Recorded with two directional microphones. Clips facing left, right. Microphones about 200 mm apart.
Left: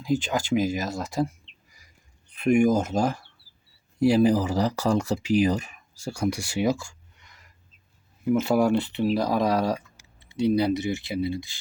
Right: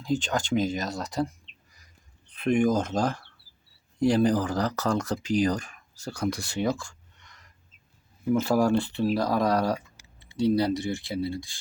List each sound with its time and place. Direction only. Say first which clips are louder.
0.0 s speech: left 2 dB; 5° left (ahead or behind)
2.4 s speech: left 3 dB; 10° left (ahead or behind)
8.4 s speech: left 1 dB; 20° left (ahead or behind)